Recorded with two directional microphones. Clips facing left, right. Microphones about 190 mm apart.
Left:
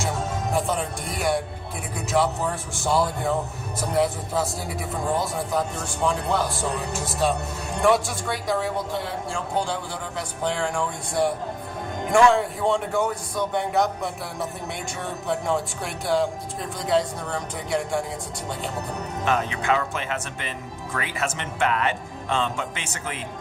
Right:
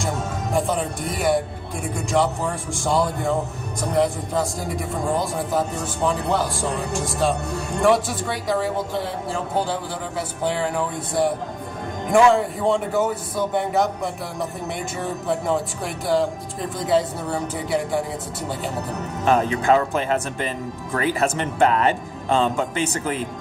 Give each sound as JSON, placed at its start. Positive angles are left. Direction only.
{"t": 0.5, "sound": "speech", "side_deg": 0}
{"t": 15.3, "sound": "speech", "side_deg": 0}
{"t": 19.2, "sound": "speech", "side_deg": -35}